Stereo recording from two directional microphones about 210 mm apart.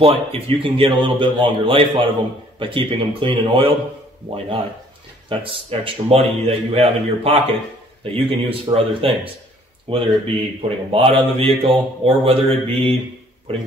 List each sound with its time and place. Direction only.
0.0 s a man's voice: 25° right (ahead or behind)